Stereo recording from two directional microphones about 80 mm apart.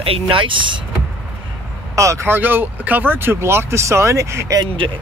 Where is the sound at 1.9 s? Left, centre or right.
Right.